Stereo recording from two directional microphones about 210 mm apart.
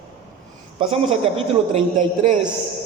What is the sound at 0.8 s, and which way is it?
Speech, 25° right (ahead or behind).